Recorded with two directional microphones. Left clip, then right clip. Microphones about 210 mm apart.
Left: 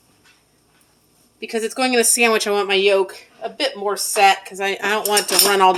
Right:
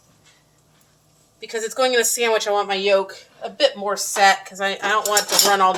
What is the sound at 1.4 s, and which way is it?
Speech, 35° left (ahead or behind).